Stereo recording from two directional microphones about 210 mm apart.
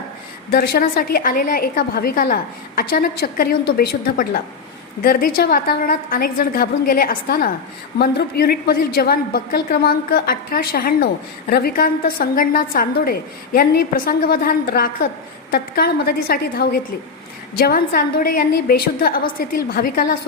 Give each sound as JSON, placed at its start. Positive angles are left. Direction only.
{"t": 0.5, "sound": "a woman's voice", "side_deg": 50}